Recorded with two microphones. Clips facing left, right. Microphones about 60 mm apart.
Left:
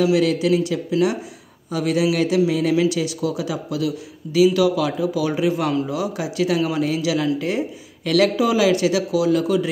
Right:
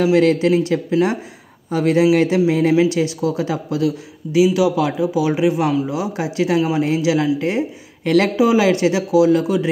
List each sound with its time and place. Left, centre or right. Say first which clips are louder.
0.0 s speech: right 3 dB; right